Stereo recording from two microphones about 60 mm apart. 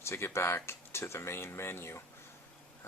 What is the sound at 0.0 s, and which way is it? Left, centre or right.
Speech, left.